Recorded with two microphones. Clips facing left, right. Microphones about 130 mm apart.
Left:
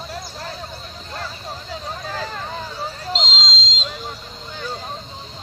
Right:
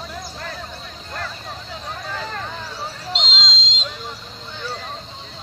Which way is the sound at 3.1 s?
35° left (ahead or behind).